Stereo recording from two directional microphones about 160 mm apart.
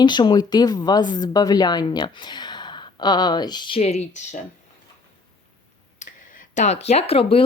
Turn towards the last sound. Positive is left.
turn(degrees=35)  # may be behind; listen again after turning